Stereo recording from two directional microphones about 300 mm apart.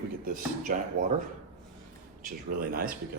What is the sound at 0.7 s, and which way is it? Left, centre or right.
Speech, right.